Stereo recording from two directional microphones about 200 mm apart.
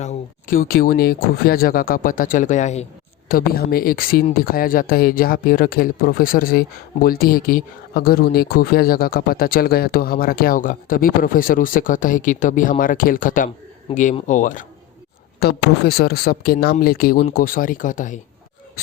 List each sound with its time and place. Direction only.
0.0 s speech: 40° left (ahead or behind)
3.2 s speech: 50° left (ahead or behind)
15.4 s speech: 55° left (ahead or behind)